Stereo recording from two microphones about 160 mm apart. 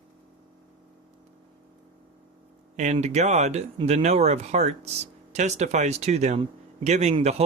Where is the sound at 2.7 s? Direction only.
45° right (ahead or behind).